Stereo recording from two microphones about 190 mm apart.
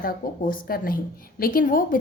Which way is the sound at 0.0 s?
50° left (ahead or behind).